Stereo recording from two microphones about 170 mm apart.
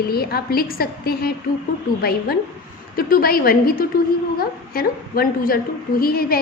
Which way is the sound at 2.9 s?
60° left (ahead or behind).